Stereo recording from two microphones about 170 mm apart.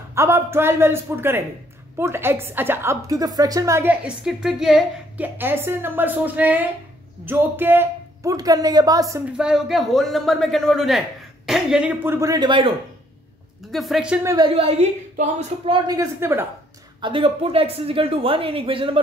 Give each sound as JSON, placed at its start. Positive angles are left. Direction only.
{"t": 0.1, "sound": "a woman's voice", "side_deg": -15}
{"t": 9.2, "sound": "a man's voice", "side_deg": -5}
{"t": 13.7, "sound": "a man's voice", "side_deg": 0}
{"t": 14.2, "sound": "speech", "side_deg": -20}
{"t": 14.5, "sound": "speech", "side_deg": -35}
{"t": 16.0, "sound": "a woman's voice", "side_deg": -15}
{"t": 17.0, "sound": "speech", "side_deg": -30}